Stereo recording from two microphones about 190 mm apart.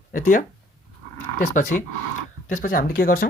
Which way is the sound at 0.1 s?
45° left (ahead or behind).